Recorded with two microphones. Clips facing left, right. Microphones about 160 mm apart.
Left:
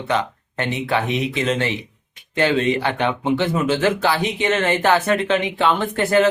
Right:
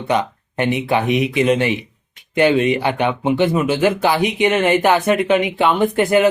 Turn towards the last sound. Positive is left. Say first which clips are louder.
# right 3 dB
turn(degrees=-15)  # may be behind; listen again after turning